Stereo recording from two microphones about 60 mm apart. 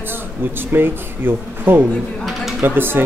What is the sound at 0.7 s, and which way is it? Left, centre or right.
Speech, right.